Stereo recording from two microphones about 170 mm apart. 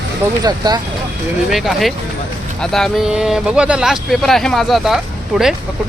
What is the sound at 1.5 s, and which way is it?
Speech, centre (ahead or behind).